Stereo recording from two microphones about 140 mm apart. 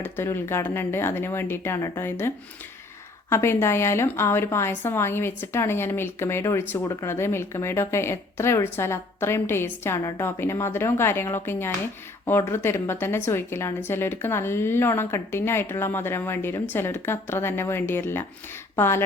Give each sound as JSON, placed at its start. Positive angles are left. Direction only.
{"t": 0.0, "sound": "a woman's voice", "side_deg": 15}